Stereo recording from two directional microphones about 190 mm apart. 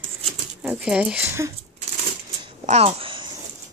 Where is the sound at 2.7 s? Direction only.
30° right (ahead or behind).